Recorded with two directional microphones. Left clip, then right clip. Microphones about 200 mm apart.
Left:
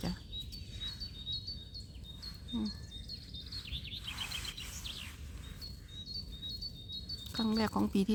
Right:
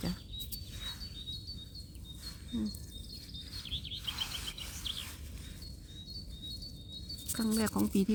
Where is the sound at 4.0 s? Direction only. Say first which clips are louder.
Right 1 dB; 30° right (ahead or behind).